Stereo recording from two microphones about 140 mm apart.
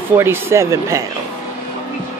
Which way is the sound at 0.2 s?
20° right (ahead or behind).